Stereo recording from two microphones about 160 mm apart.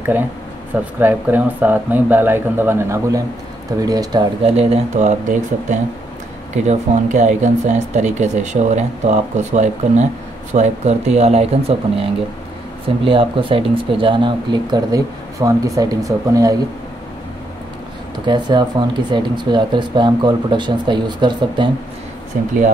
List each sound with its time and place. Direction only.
0.9 s speech: 10° right (ahead or behind)
4.6 s speech: 50° right (ahead or behind); by 16.5 s 20° right (ahead or behind)
18.2 s speech: 25° right (ahead or behind)